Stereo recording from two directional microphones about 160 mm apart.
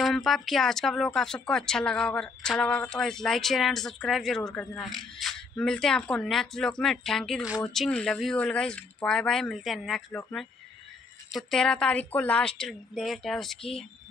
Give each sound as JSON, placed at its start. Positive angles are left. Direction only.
{"t": 0.0, "sound": "speech", "side_deg": 0}